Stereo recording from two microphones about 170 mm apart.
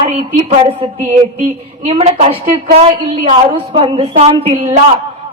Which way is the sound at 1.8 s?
40° right (ahead or behind).